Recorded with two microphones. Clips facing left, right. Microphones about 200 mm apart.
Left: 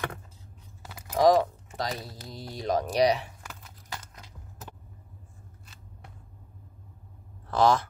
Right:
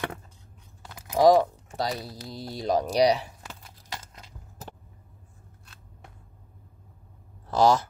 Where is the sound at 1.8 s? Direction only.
35° right (ahead or behind).